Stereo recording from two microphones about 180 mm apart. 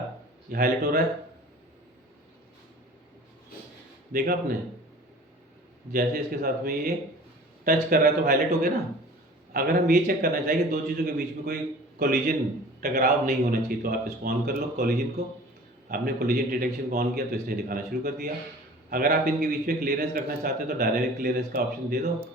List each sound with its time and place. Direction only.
0.5 s a man's voice: 55° right (ahead or behind)
4.1 s a man's voice: 55° right (ahead or behind)
5.9 s a man's voice: 55° right (ahead or behind)